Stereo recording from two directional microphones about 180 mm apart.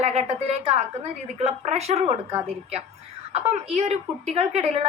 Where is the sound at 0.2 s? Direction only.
35° right (ahead or behind).